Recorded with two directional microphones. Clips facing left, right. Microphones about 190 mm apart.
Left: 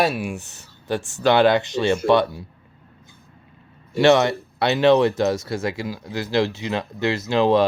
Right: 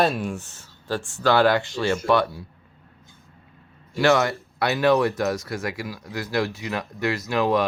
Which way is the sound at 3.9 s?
25° left (ahead or behind).